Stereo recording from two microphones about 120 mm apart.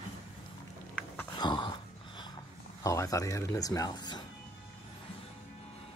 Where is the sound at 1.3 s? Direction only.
40° left (ahead or behind).